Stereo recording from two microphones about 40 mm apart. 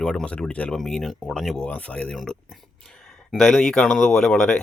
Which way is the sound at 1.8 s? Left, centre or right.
Left.